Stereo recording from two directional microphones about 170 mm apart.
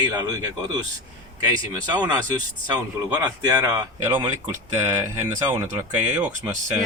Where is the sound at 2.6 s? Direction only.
25° right (ahead or behind).